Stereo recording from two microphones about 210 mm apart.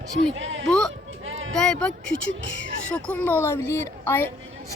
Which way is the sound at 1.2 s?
65° right (ahead or behind).